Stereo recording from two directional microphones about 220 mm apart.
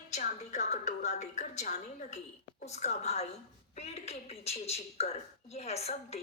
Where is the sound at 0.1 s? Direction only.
30° left (ahead or behind).